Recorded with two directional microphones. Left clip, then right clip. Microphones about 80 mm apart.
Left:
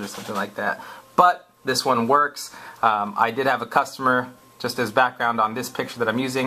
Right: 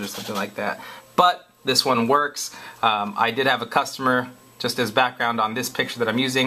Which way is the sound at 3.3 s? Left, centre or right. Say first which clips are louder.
Right 1 dB; right.